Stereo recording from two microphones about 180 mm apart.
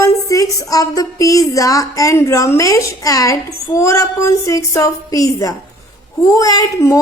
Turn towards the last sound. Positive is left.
turn(degrees=15)  # may be behind; listen again after turning